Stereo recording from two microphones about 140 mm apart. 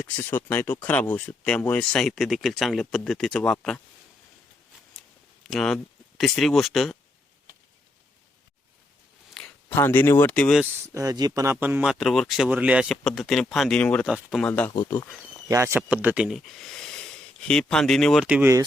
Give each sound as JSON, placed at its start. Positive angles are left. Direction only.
{"t": 0.2, "sound": "speech", "side_deg": 15}
{"t": 5.5, "sound": "speech", "side_deg": 0}
{"t": 9.3, "sound": "a sound", "side_deg": 5}
{"t": 9.7, "sound": "speech", "side_deg": 15}
{"t": 10.9, "sound": "speech", "side_deg": -25}
{"t": 11.5, "sound": "speech", "side_deg": -10}
{"t": 14.1, "sound": "speech", "side_deg": -5}
{"t": 14.4, "sound": "speech", "side_deg": 10}
{"t": 14.8, "sound": "speech", "side_deg": 25}
{"t": 15.4, "sound": "speech", "side_deg": -20}
{"t": 15.9, "sound": "speech", "side_deg": -10}